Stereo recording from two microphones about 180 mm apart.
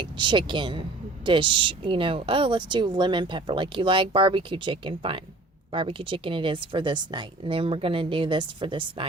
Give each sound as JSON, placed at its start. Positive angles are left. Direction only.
{"t": 0.0, "sound": "speech", "side_deg": -25}